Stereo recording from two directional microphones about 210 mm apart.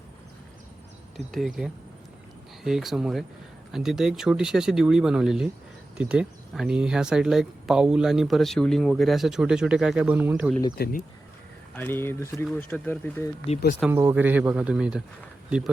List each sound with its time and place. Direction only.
1.1 s speech: centre (ahead or behind)
10.8 s speech: 50° left (ahead or behind)
11.7 s speech: 10° left (ahead or behind)
13.8 s speech: 10° right (ahead or behind)